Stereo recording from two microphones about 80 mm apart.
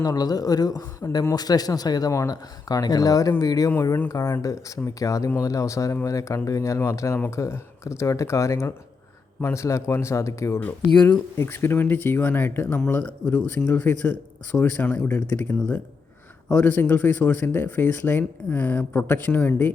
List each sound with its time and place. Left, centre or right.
0.0 s speech: left
10.6 s speech: left
16.6 s speech: left